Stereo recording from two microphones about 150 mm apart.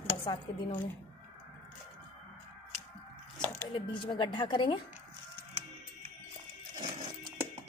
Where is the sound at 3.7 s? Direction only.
35° left (ahead or behind).